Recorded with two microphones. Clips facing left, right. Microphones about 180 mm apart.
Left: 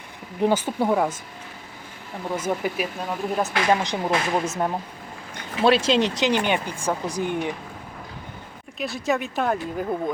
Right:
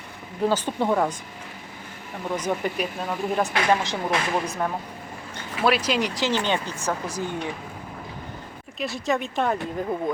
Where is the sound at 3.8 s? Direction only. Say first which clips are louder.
Left 2 dB; 15° left (ahead or behind).